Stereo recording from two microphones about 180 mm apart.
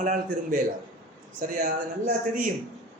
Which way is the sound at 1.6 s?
45° right (ahead or behind).